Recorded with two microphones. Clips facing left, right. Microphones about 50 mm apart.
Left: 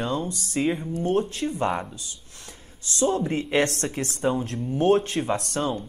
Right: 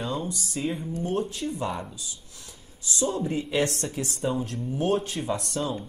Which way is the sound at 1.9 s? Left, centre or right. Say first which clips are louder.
Left 1 dB; left.